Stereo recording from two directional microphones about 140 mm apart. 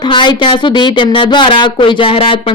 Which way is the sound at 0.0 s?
35° left (ahead or behind).